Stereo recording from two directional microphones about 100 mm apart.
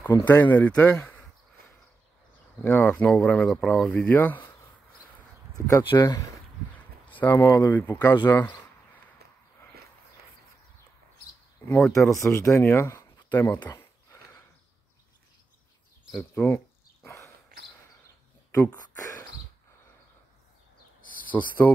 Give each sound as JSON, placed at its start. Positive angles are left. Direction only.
{"t": 0.3, "sound": "speech", "side_deg": 15}
{"t": 2.6, "sound": "speech", "side_deg": 20}
{"t": 3.9, "sound": "speech", "side_deg": 15}
{"t": 5.5, "sound": "speech", "side_deg": 35}
{"t": 7.1, "sound": "a sound", "side_deg": 15}
{"t": 7.3, "sound": "speech", "side_deg": 25}
{"t": 11.8, "sound": "speech", "side_deg": 0}
{"t": 12.2, "sound": "speech", "side_deg": 25}
{"t": 13.7, "sound": "a sound", "side_deg": 25}
{"t": 16.2, "sound": "a sound", "side_deg": 20}
{"t": 18.5, "sound": "speech", "side_deg": 20}
{"t": 21.3, "sound": "speech", "side_deg": 15}